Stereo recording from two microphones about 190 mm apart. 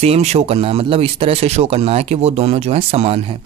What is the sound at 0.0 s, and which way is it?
A man's voice, 35° right (ahead or behind).